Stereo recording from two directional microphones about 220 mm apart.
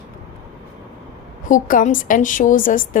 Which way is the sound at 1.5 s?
35° left (ahead or behind).